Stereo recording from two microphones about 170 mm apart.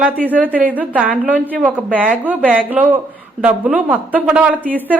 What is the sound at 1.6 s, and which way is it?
Speech, 10° right (ahead or behind).